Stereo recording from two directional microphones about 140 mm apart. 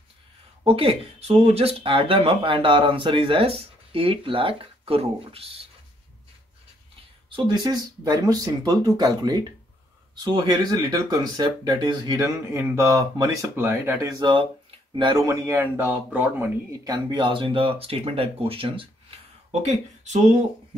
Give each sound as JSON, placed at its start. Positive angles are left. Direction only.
{"t": 0.7, "sound": "speech", "side_deg": -45}
{"t": 7.2, "sound": "speech", "side_deg": -35}
{"t": 15.2, "sound": "speech", "side_deg": -20}
{"t": 16.8, "sound": "speech", "side_deg": -30}
{"t": 19.6, "sound": "speech", "side_deg": -50}